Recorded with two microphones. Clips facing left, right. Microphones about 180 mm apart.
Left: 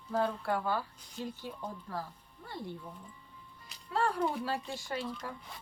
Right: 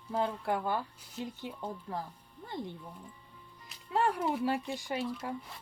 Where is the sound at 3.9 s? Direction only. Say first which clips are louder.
Right 1 dB; 15° right (ahead or behind).